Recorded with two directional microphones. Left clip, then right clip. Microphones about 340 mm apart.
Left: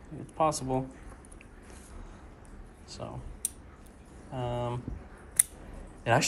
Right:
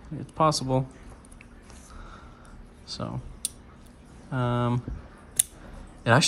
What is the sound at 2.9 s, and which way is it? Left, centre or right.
Speech, centre.